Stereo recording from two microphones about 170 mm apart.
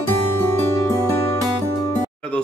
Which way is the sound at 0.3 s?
15° left (ahead or behind).